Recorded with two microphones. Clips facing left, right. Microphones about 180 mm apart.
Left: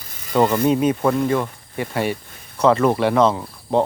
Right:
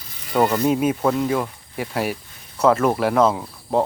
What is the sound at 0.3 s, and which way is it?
Speech, 5° right (ahead or behind).